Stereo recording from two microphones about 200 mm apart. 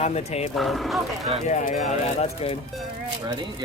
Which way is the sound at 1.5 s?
40° left (ahead or behind).